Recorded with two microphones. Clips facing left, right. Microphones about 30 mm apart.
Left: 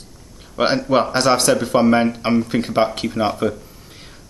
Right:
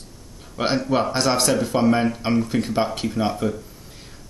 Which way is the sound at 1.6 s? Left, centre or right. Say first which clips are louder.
Left 4 dB; left.